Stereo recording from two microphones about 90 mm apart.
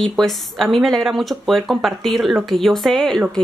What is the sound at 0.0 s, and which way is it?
Speech, centre (ahead or behind).